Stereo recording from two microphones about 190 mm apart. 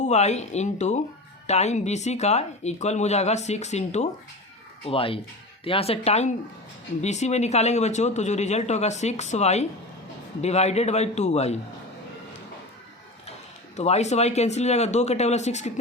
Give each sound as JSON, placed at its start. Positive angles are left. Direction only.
{"t": 0.0, "sound": "speech", "side_deg": 35}
{"t": 13.7, "sound": "speech", "side_deg": 35}